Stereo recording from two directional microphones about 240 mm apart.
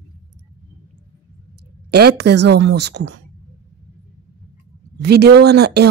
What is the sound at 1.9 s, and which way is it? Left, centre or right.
Speech, right.